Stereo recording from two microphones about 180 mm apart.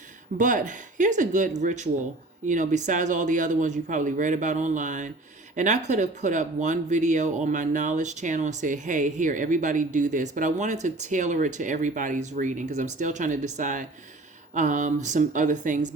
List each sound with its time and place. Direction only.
0.3 s speech: 45° right (ahead or behind)